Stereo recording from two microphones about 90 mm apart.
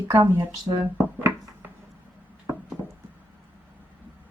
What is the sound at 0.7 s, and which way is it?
Speech, 50° right (ahead or behind).